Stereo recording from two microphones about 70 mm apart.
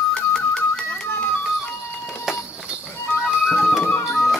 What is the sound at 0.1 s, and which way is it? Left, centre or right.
Music, centre.